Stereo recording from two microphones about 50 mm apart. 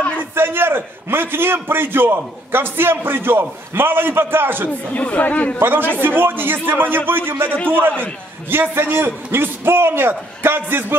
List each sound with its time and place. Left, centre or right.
0.3 s a man's voice: right
4.6 s speech: left
5.6 s a man's voice: right
7.5 s speech: left
8.0 s a man's voice: right